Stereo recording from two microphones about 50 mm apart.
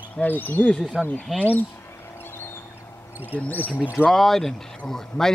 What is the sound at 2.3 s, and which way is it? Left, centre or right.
Duck, left.